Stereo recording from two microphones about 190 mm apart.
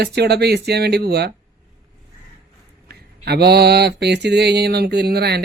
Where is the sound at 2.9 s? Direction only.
55° right (ahead or behind).